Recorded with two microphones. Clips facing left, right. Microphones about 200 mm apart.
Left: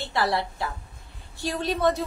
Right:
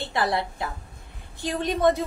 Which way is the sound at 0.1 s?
15° right (ahead or behind).